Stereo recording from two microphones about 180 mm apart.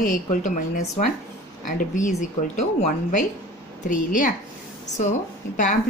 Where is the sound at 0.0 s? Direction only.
45° left (ahead or behind).